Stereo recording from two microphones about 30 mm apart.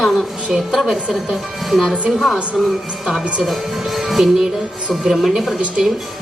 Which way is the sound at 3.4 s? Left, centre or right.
Centre.